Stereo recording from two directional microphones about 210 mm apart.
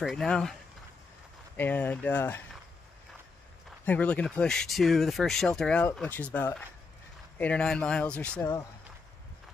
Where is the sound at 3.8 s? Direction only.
5° left (ahead or behind).